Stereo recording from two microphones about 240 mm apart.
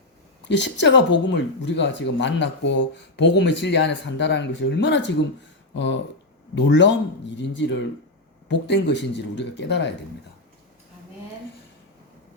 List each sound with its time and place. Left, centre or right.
0.4 s speech: left